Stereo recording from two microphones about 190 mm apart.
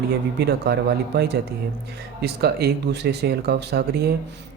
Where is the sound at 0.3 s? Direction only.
60° right (ahead or behind).